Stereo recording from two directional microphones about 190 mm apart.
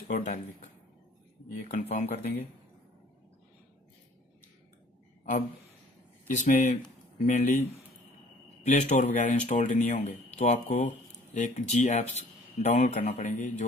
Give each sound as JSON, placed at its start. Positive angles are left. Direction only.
{"t": 0.1, "sound": "speech", "side_deg": 40}
{"t": 6.2, "sound": "speech", "side_deg": 40}
{"t": 8.6, "sound": "speech", "side_deg": 35}